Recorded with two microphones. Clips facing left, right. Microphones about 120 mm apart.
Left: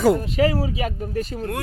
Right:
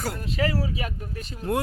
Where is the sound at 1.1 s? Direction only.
45° left (ahead or behind).